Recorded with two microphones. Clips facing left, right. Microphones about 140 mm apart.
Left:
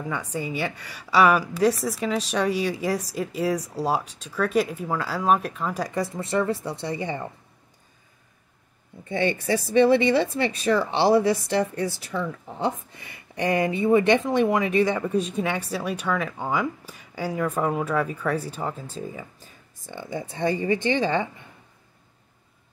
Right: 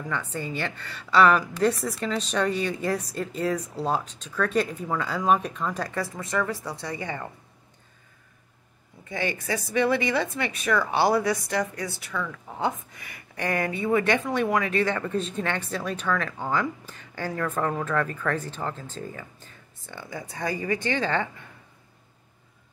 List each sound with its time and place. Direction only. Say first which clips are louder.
0.0 s speech: left 2 dB; 10° left (ahead or behind)
5.9 s speech: left 5 dB; 30° left (ahead or behind)
9.1 s speech: left 5 dB; 25° left (ahead or behind)